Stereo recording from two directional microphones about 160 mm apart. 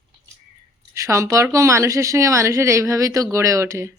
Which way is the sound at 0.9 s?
20° right (ahead or behind).